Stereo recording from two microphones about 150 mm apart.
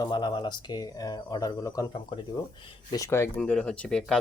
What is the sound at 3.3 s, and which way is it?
Speech, 5° left (ahead or behind).